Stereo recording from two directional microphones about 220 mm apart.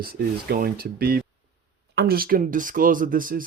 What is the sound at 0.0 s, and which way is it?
Speech, 45° right (ahead or behind).